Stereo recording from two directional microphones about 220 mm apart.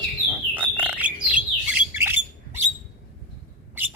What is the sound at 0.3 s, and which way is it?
Bird, 10° right (ahead or behind).